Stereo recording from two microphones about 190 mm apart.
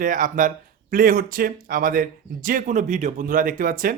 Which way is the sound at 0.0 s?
45° right (ahead or behind).